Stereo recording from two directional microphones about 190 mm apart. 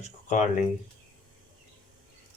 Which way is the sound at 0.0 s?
40° left (ahead or behind).